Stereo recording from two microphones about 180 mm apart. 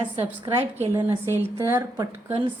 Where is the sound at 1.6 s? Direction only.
15° right (ahead or behind).